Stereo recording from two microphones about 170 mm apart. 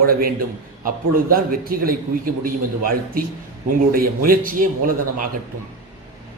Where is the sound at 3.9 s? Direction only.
60° right (ahead or behind).